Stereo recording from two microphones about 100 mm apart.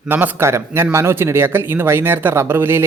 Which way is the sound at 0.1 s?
20° right (ahead or behind).